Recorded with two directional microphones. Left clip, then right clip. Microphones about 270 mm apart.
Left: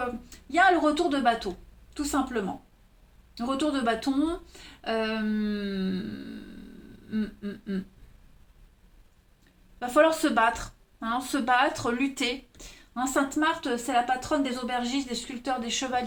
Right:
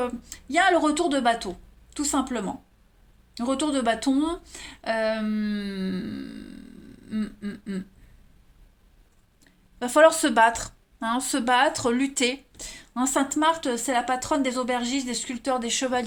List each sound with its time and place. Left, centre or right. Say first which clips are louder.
0.0 s a woman's voice: right 3 dB; right
9.7 s speech: right 4 dB; right